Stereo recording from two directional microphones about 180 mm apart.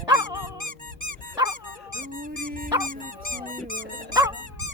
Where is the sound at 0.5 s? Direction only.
45° right (ahead or behind).